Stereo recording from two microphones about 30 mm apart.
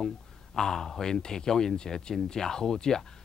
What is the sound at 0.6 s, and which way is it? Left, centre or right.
Speech, centre.